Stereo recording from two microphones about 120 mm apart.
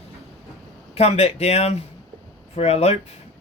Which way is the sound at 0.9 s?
60° left (ahead or behind).